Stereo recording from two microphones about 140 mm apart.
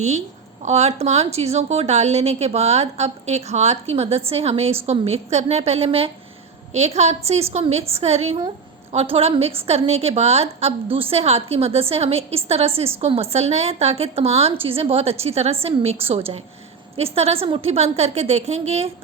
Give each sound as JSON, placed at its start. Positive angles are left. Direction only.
{"t": 0.6, "sound": "a woman's voice", "side_deg": -50}